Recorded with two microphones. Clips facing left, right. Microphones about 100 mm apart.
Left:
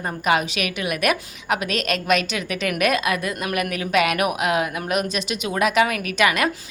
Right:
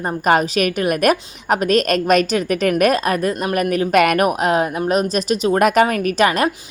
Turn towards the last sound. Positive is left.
turn(degrees=-35)  # may be behind; listen again after turning